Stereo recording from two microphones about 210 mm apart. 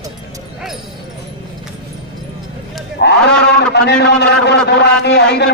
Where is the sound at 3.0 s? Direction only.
50° left (ahead or behind).